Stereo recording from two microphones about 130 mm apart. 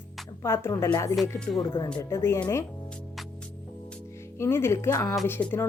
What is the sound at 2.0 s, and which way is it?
Speech, 20° left (ahead or behind).